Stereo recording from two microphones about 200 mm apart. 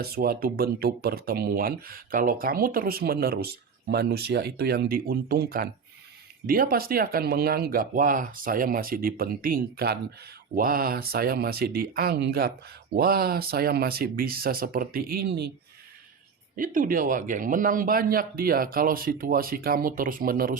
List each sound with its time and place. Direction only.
0.0 s speech: 50° right (ahead or behind)
16.6 s speech: 45° right (ahead or behind)